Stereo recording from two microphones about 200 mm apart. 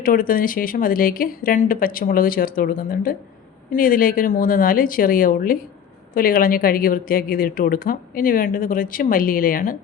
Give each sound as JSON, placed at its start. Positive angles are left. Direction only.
{"t": 0.0, "sound": "speech", "side_deg": 45}